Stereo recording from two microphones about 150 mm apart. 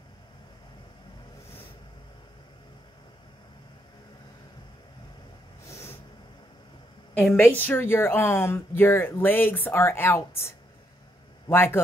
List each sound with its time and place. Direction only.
5.7 s vehicle: 20° left (ahead or behind)
7.2 s a woman's voice: 10° left (ahead or behind)